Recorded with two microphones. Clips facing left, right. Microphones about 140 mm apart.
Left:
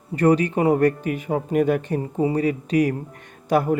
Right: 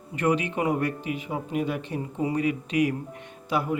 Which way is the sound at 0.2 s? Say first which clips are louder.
Left 7 dB; 40° left (ahead or behind).